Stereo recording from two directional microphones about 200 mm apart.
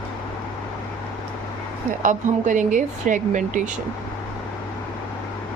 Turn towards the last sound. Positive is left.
turn(degrees=-40)  # may be behind; listen again after turning